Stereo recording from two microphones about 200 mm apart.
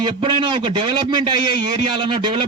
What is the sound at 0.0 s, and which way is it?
A man's voice, 25° right (ahead or behind).